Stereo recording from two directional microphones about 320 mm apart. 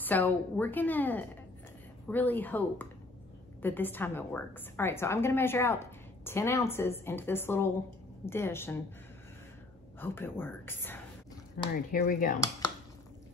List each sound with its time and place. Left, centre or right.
0.0 s a woman's voice: centre
9.9 s a woman's voice: centre
11.6 s speech: left